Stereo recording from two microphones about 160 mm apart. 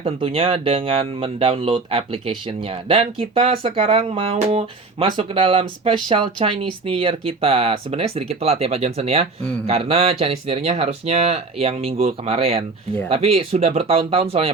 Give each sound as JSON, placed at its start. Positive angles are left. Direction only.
{"t": 0.0, "sound": "speech", "side_deg": -35}